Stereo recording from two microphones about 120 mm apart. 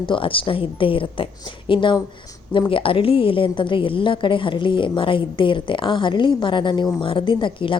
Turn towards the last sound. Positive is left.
turn(degrees=45)  # may be behind; listen again after turning